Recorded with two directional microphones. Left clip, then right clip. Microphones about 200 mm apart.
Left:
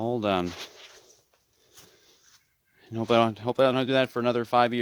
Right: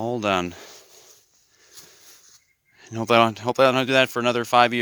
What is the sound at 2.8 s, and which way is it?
Speech, 5° right (ahead or behind).